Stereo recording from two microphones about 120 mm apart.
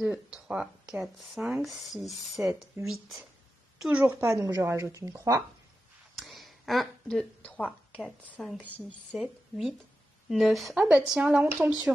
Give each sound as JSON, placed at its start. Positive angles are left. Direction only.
{"t": 0.0, "sound": "speech", "side_deg": -5}
{"t": 4.0, "sound": "speech", "side_deg": -20}
{"t": 6.1, "sound": "a sound", "side_deg": 0}
{"t": 8.0, "sound": "a woman's voice", "side_deg": 0}